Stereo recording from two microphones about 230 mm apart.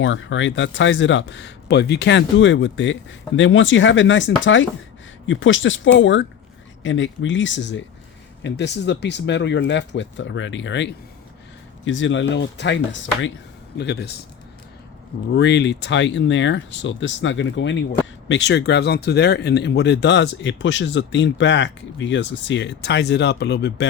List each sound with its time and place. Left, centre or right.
0.0 s speech: left
15.3 s speech: left